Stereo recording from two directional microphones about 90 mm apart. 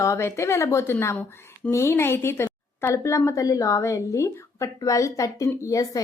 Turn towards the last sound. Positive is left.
turn(degrees=40)  # may be behind; listen again after turning